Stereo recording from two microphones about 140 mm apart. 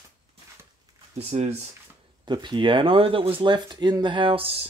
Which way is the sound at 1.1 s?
50° right (ahead or behind).